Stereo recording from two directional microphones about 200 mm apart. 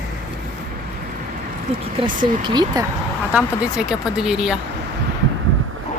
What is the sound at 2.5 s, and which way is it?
Speech, 20° right (ahead or behind).